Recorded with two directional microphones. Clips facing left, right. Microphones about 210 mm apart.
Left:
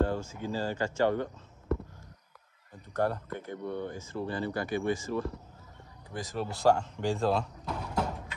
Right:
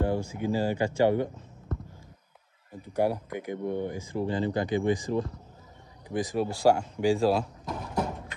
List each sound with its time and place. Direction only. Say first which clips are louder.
0.0 s speech: right 2 dB; 15° right (ahead or behind)
2.8 s speech: right 3 dB; 10° right (ahead or behind)